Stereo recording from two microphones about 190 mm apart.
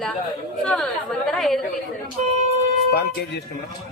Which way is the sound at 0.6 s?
5° left (ahead or behind).